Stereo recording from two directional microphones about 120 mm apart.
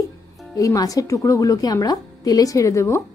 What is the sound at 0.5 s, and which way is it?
A woman's voice, 30° left (ahead or behind).